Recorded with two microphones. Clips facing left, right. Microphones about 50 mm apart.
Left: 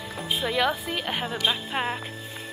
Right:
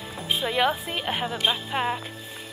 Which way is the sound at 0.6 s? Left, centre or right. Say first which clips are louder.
Right 1 dB; right.